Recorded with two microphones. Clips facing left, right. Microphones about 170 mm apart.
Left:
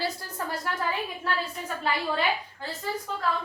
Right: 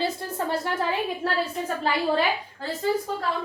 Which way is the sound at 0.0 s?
25° right (ahead or behind).